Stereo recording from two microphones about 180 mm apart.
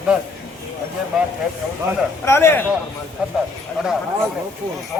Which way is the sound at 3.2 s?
5° right (ahead or behind).